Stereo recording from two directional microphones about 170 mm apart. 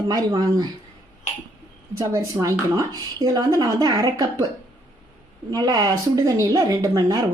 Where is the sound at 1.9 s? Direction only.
20° right (ahead or behind).